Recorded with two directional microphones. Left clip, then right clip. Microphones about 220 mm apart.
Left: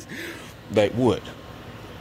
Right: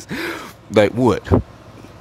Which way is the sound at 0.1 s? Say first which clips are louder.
Right 10 dB; 30° right (ahead or behind).